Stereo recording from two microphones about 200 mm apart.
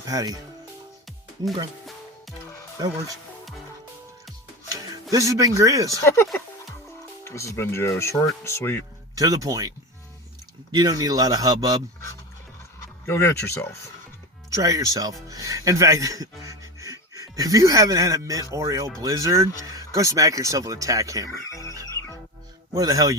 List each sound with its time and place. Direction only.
0.0 s speech: 20° right (ahead or behind)
5.1 s speech: 15° right (ahead or behind)
6.0 s speech: 15° left (ahead or behind)
6.2 s music: centre (ahead or behind)
7.3 s speech: 15° left (ahead or behind)
9.1 s a man's voice: 15° right (ahead or behind)
12.8 s a sound: 10° left (ahead or behind)
13.5 s speech: 10° left (ahead or behind)
14.5 s speech: 15° right (ahead or behind)
21.5 s frog: 15° left (ahead or behind)
22.7 s speech: 15° right (ahead or behind)